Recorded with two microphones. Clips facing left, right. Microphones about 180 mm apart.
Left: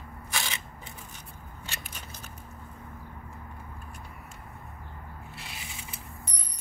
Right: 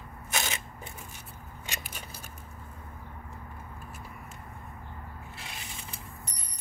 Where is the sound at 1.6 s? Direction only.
15° right (ahead or behind).